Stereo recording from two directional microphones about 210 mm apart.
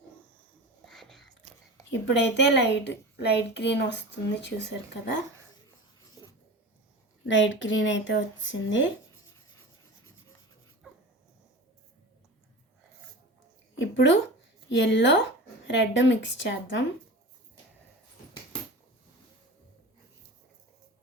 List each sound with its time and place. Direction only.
0.9 s whispering: centre (ahead or behind)
1.9 s a woman's voice: 55° left (ahead or behind)
7.3 s a woman's voice: 60° left (ahead or behind)
13.7 s a sound: 60° left (ahead or behind)
14.7 s a woman's voice: 60° left (ahead or behind)